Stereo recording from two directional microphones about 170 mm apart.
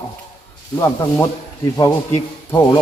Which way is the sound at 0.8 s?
15° left (ahead or behind).